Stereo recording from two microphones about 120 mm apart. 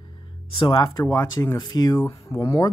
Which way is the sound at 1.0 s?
30° left (ahead or behind).